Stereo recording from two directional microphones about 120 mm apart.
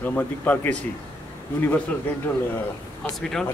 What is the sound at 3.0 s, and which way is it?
Speech, 5° left (ahead or behind).